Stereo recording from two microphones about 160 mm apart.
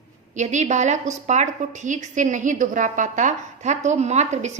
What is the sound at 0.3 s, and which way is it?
A woman's voice, 45° right (ahead or behind).